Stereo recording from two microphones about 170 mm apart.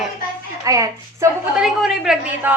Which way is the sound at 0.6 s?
20° right (ahead or behind).